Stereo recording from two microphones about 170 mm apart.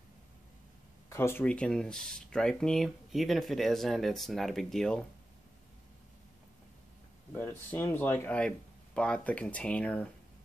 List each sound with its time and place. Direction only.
1.1 s speech: 15° left (ahead or behind)
7.3 s speech: 10° left (ahead or behind)